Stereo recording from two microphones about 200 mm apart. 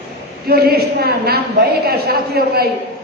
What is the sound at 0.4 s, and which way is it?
A woman's voice, 50° right (ahead or behind).